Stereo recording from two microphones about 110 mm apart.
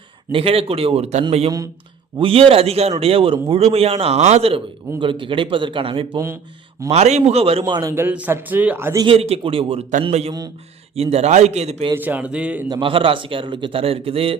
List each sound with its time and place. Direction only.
0.3 s a man's voice: 55° right (ahead or behind)
1.5 s a man's voice: 30° right (ahead or behind)
2.1 s a man's voice: 55° right (ahead or behind)
4.9 s a man's voice: 50° right (ahead or behind)
6.1 s speech: 25° right (ahead or behind)
6.9 s a man's voice: 80° right; by 7.6 s 65° right (ahead or behind)
7.7 s a man's voice: 35° right (ahead or behind)
7.9 s a man's voice: 15° right (ahead or behind)
9.0 s a man's voice: 65° right (ahead or behind)
11.9 s a man's voice: 15° right (ahead or behind)
12.6 s a man's voice: 40° right (ahead or behind)
12.9 s a man's voice: 55° right (ahead or behind)